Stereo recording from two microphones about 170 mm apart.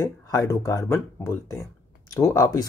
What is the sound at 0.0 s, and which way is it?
Speech, 20° left (ahead or behind).